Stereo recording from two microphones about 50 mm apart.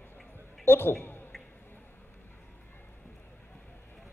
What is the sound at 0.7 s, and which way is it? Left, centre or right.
Speech, left.